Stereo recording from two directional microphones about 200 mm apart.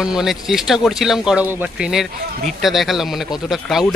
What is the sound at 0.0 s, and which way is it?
Speech, 5° right (ahead or behind).